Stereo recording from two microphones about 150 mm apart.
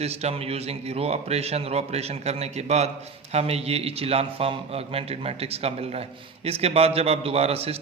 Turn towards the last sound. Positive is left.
turn(degrees=-40)  # may be behind; listen again after turning